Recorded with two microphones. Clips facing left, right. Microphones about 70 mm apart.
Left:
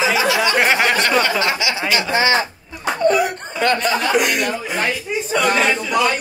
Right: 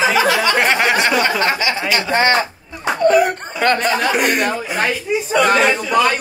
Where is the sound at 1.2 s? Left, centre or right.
Right.